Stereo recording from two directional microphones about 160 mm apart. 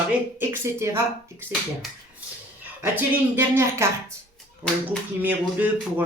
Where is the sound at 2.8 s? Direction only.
10° right (ahead or behind).